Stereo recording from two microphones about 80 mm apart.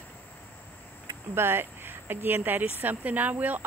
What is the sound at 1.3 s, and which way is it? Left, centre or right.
Speech, right.